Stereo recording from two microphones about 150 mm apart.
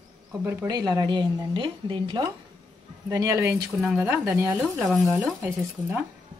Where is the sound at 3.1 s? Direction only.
20° right (ahead or behind).